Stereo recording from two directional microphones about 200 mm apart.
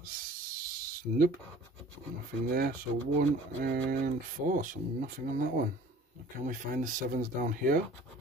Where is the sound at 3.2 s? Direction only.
50° right (ahead or behind).